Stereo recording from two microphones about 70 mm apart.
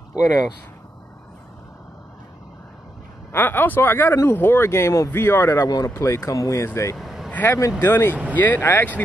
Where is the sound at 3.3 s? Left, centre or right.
Left.